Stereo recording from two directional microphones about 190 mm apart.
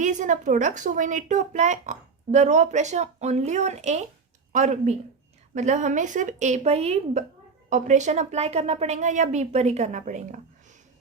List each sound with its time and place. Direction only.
0.0 s speech: 40° right (ahead or behind)